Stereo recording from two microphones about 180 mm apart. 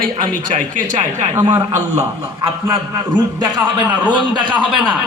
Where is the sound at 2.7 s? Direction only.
20° right (ahead or behind).